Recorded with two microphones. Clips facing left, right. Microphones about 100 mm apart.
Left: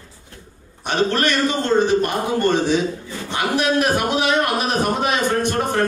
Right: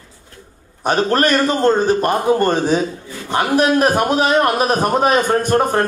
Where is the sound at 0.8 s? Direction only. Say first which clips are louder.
Right 4 dB; 45° right (ahead or behind).